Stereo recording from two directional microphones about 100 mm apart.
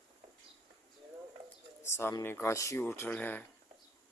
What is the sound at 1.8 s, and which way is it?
Speech, 25° left (ahead or behind).